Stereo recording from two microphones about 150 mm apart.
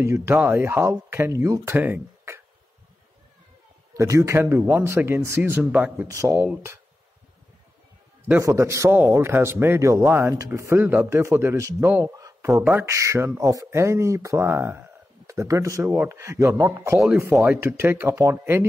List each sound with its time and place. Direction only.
0.0 s speech: 15° right (ahead or behind)
3.9 s speech: 20° right (ahead or behind)
8.3 s a man's voice: 20° right (ahead or behind)